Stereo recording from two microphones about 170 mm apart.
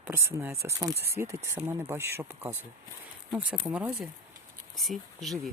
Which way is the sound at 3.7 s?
5° right (ahead or behind).